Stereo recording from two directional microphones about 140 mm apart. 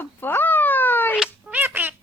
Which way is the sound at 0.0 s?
15° left (ahead or behind).